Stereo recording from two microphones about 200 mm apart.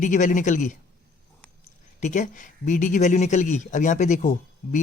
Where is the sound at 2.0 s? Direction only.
40° left (ahead or behind).